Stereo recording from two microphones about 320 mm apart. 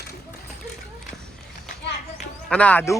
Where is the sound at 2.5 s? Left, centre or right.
Centre.